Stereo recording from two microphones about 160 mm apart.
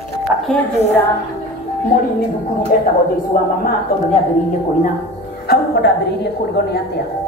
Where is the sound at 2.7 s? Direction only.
60° left (ahead or behind).